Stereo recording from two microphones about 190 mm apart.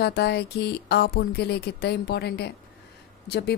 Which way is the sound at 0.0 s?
60° left (ahead or behind).